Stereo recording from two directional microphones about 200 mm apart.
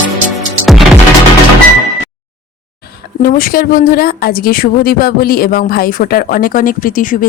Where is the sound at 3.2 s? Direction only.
45° left (ahead or behind).